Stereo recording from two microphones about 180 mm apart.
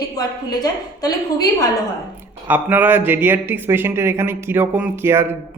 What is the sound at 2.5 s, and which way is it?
Speech, 10° right (ahead or behind).